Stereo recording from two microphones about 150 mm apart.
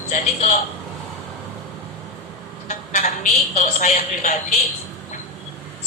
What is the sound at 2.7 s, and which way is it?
A woman's voice, 55° left (ahead or behind).